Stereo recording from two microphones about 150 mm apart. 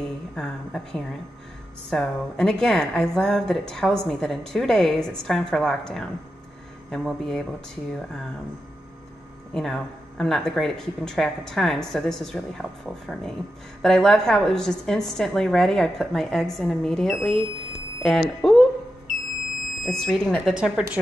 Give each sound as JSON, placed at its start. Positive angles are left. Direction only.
{"t": 0.0, "sound": "a woman's voice", "side_deg": 5}
{"t": 9.5, "sound": "a woman's voice", "side_deg": 0}
{"t": 19.8, "sound": "a woman's voice", "side_deg": 0}